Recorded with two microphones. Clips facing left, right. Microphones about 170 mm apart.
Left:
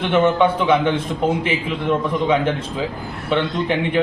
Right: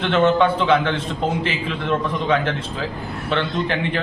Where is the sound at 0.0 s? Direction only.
15° left (ahead or behind).